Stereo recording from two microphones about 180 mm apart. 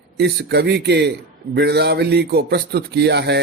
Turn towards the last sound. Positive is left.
turn(degrees=-70)  # may be behind; listen again after turning